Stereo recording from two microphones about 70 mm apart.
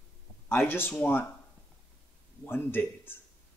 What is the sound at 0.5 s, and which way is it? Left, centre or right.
Speech, left.